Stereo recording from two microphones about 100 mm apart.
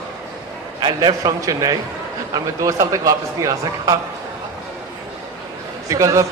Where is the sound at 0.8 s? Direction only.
45° right (ahead or behind).